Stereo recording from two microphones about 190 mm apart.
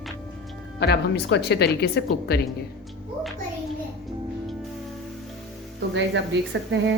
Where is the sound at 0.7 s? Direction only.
60° left (ahead or behind).